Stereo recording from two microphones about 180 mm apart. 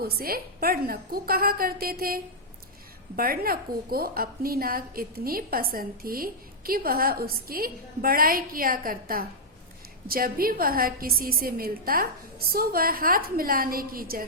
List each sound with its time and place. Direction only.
0.0 s a woman's voice: 55° right (ahead or behind)